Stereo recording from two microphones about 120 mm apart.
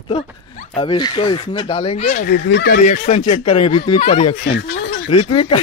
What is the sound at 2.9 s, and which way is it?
Speech, 70° left (ahead or behind).